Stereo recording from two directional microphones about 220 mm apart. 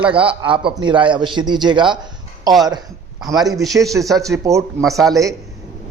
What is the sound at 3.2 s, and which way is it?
Speech, 15° right (ahead or behind).